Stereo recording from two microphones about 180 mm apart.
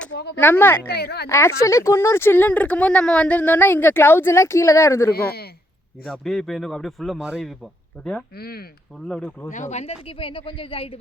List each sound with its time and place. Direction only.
0.1 s speech: 65° left (ahead or behind)
0.3 s speech: 10° left (ahead or behind)
0.9 s speech: 60° left (ahead or behind)
1.3 s speech: 15° left (ahead or behind)
6.1 s a man's voice: centre (ahead or behind)
8.4 s speech: 60° left (ahead or behind)
9.0 s a man's voice: 5° left (ahead or behind)
9.5 s speech: 40° left (ahead or behind)